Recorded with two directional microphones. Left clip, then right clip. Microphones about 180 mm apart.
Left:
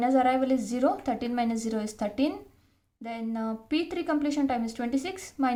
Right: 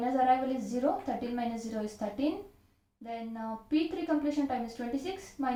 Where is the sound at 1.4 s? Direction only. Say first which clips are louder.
Left 6 dB; 35° left (ahead or behind).